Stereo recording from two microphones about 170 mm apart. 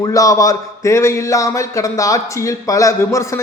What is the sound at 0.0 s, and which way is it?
Speech, 20° left (ahead or behind).